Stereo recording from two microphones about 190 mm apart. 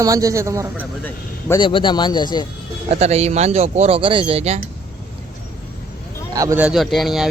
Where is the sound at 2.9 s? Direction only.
35° right (ahead or behind).